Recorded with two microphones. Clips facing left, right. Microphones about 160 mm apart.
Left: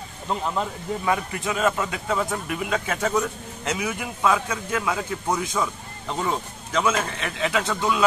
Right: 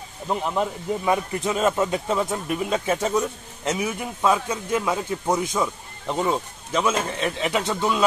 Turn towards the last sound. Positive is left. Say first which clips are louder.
# right 1 dB
turn(degrees=-25)  # may be behind; listen again after turning